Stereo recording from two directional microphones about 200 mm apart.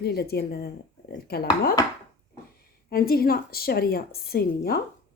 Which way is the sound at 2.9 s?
50° left (ahead or behind).